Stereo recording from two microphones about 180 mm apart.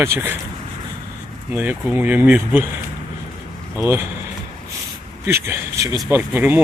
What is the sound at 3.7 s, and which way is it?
Speech, 15° right (ahead or behind).